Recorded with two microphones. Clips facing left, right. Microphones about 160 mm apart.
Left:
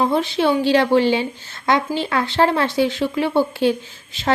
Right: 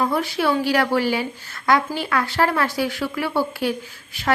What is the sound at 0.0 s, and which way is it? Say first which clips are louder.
Speech: left 3 dB; 25° left (ahead or behind).